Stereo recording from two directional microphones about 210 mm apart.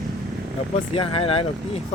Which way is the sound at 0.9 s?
25° left (ahead or behind).